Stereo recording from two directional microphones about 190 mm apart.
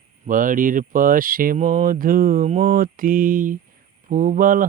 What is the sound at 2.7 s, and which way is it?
Mantra, 50° right (ahead or behind).